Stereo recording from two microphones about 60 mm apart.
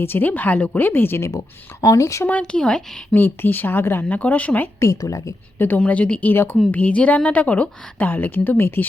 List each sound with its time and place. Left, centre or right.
0.0 s speech: left
1.8 s a woman's voice: left
2.4 s speech: centre
3.2 s speech: left
4.2 s a woman's voice: left
4.8 s a woman's voice: left
5.5 s a woman's voice: left
5.8 s a woman's voice: left
6.3 s speech: left
6.7 s a woman's voice: left